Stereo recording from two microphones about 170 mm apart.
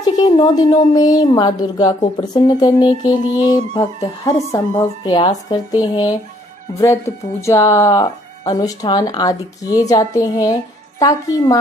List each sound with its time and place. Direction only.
0.0 s speech: 25° left (ahead or behind)
7.4 s speech: 15° left (ahead or behind)